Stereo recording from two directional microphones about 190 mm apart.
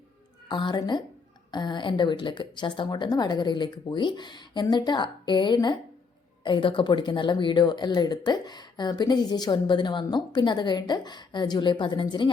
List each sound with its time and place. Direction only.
0.4 s speech: 25° left (ahead or behind)